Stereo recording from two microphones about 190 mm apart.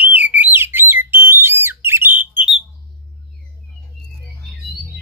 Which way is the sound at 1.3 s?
10° right (ahead or behind).